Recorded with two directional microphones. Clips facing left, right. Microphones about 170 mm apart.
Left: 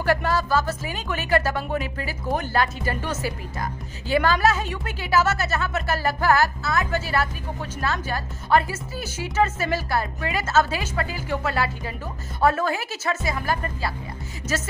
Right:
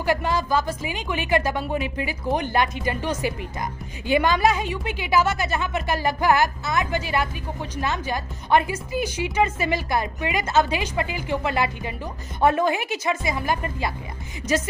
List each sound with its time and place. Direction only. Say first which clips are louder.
0.0 s a woman's voice: left 1 dB; 15° right (ahead or behind)
14.4 s music: right 5 dB; 5° left (ahead or behind)